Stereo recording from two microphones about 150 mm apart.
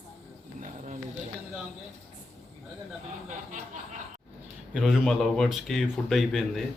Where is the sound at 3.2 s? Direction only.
55° right (ahead or behind).